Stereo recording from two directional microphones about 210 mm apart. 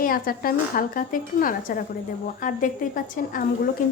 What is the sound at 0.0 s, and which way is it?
A woman's voice, 45° left (ahead or behind).